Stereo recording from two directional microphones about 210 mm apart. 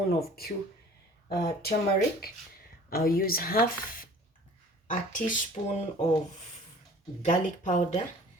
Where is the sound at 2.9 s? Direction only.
45° left (ahead or behind).